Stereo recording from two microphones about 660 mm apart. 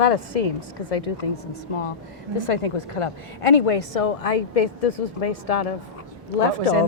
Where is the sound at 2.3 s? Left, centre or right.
Left.